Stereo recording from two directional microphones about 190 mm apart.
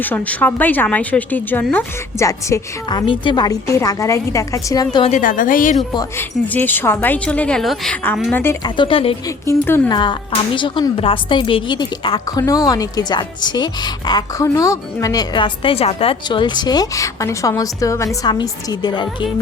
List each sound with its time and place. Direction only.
0.0 s a woman's voice: 10° left (ahead or behind)
5.1 s a woman's voice: 45° left (ahead or behind)
5.9 s a woman's voice: 20° left (ahead or behind); by 8.4 s 5° left (ahead or behind)
8.6 s a woman's voice: 25° left (ahead or behind)
9.5 s a woman's voice: 10° left (ahead or behind)
9.9 s a woman's voice: 25° left (ahead or behind)